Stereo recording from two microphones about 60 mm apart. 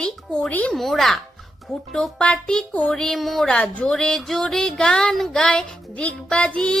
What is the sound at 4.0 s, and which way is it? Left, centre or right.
Music, centre.